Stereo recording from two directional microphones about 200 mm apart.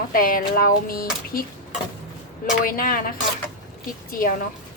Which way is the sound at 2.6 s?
45° left (ahead or behind).